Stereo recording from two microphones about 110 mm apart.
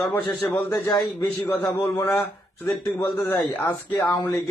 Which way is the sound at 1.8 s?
20° left (ahead or behind).